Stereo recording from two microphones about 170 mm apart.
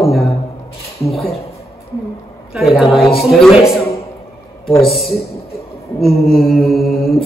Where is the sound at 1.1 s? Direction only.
Centre (ahead or behind).